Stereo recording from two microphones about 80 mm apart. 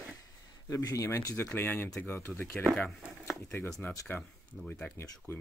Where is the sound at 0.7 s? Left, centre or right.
Left.